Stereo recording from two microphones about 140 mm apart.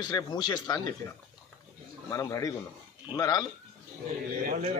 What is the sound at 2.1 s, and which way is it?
Speech, 25° left (ahead or behind).